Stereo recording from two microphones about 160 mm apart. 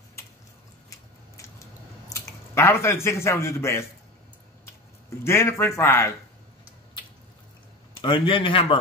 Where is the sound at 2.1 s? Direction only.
20° left (ahead or behind).